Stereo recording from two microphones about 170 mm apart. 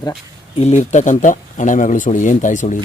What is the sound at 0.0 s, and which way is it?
Speech, 30° left (ahead or behind).